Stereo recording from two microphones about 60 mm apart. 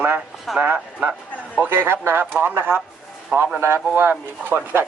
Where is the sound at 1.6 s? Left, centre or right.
Right.